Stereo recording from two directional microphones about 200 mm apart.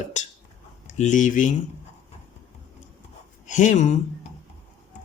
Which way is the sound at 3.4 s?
35° left (ahead or behind).